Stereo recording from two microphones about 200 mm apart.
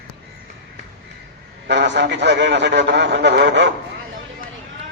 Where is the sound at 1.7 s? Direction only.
60° right (ahead or behind).